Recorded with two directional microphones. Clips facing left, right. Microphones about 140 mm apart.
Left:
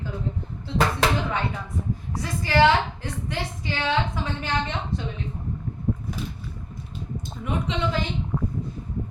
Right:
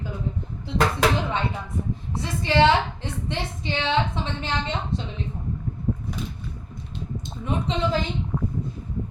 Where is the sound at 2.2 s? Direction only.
25° right (ahead or behind).